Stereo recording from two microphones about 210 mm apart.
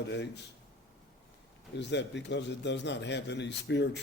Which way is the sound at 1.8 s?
55° left (ahead or behind).